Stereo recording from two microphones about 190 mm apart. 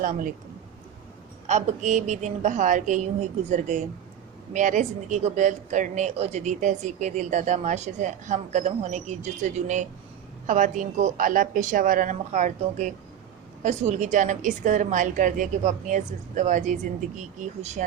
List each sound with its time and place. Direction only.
0.0 s a woman's voice: 45° right (ahead or behind)
1.5 s a woman's voice: 40° right (ahead or behind)